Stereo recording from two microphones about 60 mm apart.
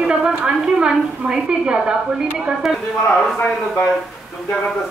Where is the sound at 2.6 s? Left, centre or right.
Centre.